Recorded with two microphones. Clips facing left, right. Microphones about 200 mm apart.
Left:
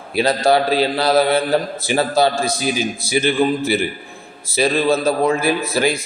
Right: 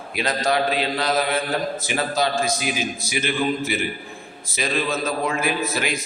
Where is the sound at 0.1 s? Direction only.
35° left (ahead or behind).